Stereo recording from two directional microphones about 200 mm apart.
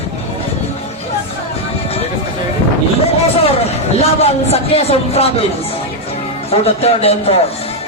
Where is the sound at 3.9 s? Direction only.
30° left (ahead or behind).